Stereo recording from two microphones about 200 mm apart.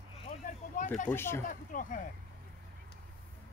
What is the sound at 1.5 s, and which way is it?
Speech, 40° left (ahead or behind).